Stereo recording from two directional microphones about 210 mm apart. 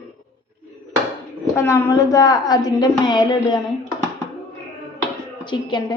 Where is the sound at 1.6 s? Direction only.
15° left (ahead or behind).